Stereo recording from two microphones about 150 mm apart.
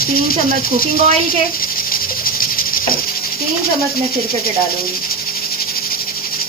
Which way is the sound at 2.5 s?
70° left (ahead or behind).